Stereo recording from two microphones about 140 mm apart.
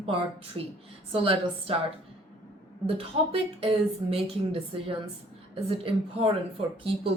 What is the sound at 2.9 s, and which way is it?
A woman's voice, 40° right (ahead or behind).